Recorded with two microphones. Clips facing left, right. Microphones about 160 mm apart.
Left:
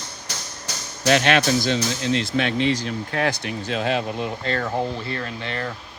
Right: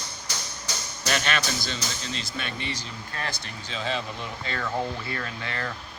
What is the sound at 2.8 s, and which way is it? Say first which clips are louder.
Speech: left 11 dB; 70° left (ahead or behind).